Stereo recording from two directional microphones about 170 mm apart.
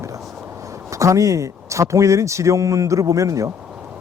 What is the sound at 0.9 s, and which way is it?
Speech, 20° right (ahead or behind).